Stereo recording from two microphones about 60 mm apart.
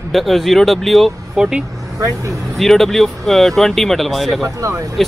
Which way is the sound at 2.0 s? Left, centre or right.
Right.